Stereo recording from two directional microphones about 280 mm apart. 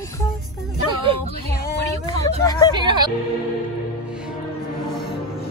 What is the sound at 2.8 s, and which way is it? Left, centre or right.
Speech, centre.